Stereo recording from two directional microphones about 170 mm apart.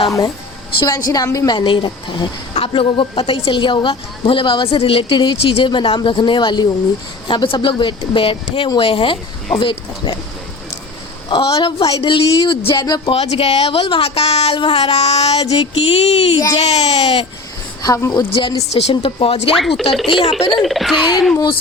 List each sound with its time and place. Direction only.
0.8 s a woman's voice: 20° left (ahead or behind)
11.3 s a woman's voice: 25° left (ahead or behind)
13.1 s a woman's voice: 35° left (ahead or behind)
17.8 s a woman's voice: 20° left (ahead or behind)
18.9 s a woman's voice: 35° left (ahead or behind)
19.5 s speech: centre (ahead or behind)
20.1 s a woman's voice: 30° left (ahead or behind)
20.6 s speech: centre (ahead or behind)